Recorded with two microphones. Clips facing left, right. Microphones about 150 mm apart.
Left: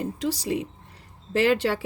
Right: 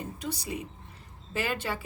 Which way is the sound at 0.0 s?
90° left.